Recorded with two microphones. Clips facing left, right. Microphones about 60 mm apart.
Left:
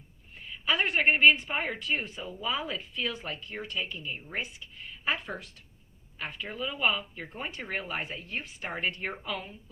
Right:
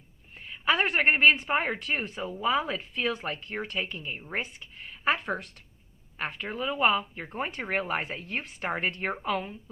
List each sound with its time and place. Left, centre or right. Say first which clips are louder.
0.6 s speech: right 2 dB; right